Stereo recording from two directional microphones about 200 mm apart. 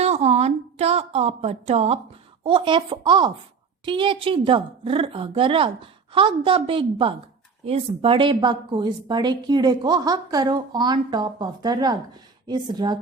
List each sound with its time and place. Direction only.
0.0 s a woman's voice: 30° right (ahead or behind)